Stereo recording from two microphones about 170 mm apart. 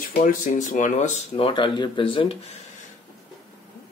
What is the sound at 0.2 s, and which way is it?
Speech, 50° left (ahead or behind).